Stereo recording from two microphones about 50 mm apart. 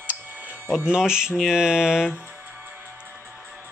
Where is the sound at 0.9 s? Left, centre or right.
Centre.